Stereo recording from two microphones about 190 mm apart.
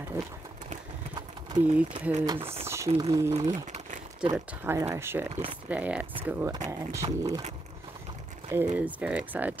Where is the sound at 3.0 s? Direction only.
15° right (ahead or behind).